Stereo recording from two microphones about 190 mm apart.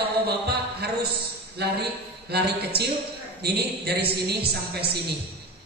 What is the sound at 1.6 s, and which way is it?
Speech, 60° right (ahead or behind).